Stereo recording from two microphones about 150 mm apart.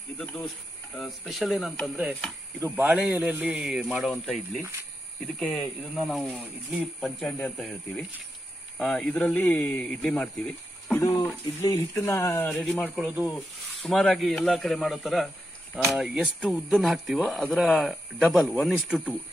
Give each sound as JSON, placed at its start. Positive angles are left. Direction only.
{"t": 0.2, "sound": "a man's voice", "side_deg": 5}
{"t": 5.4, "sound": "a man's voice", "side_deg": 0}
{"t": 11.0, "sound": "a man's voice", "side_deg": 25}
{"t": 12.8, "sound": "speech", "side_deg": -5}